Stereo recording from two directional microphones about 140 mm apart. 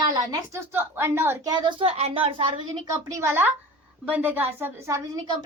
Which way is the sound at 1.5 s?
35° right (ahead or behind).